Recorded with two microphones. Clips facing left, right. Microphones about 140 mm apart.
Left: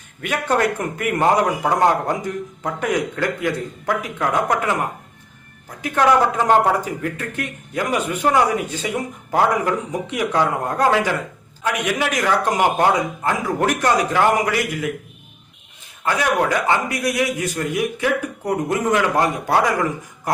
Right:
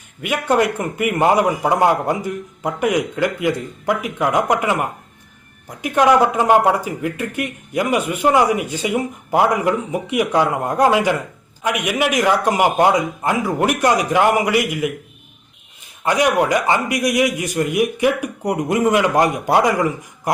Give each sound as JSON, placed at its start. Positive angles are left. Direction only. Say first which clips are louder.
{"t": 0.2, "sound": "speech", "louder": "right 2 dB", "side_deg": -10}
{"t": 16.0, "sound": "speech", "louder": "right 3 dB", "side_deg": -15}